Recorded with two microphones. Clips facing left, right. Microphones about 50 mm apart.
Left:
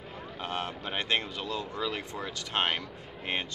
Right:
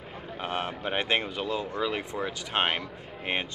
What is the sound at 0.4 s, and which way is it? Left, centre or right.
Speech, centre.